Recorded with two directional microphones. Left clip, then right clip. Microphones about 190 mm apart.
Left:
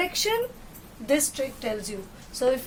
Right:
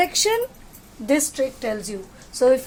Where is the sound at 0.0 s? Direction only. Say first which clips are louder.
Right 5 dB; 60° right (ahead or behind).